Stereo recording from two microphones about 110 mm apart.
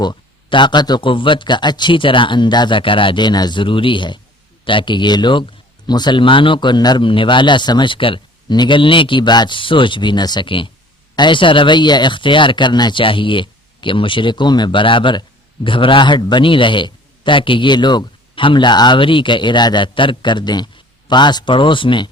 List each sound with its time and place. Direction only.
0.0 s a man's voice: 45° left (ahead or behind)